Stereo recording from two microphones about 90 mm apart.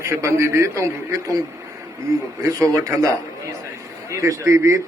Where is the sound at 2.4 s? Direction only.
40° right (ahead or behind).